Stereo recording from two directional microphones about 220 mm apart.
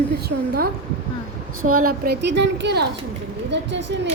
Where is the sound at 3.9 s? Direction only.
55° right (ahead or behind).